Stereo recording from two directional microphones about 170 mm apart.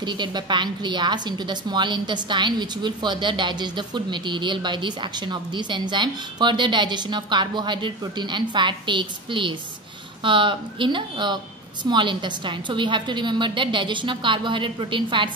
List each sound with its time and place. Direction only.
0.0 s a woman's voice: 25° right (ahead or behind)